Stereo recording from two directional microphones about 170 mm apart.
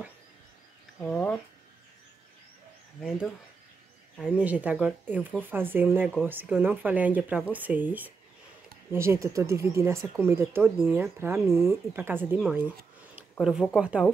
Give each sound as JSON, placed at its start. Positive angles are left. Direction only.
{"t": 1.0, "sound": "speech", "side_deg": 10}
{"t": 3.0, "sound": "speech", "side_deg": 0}
{"t": 4.4, "sound": "speech", "side_deg": -10}